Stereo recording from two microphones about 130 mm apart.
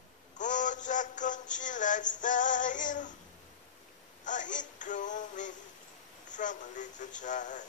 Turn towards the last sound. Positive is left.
turn(degrees=70)  # may be behind; listen again after turning